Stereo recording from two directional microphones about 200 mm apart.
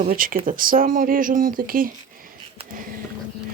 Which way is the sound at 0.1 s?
45° right (ahead or behind).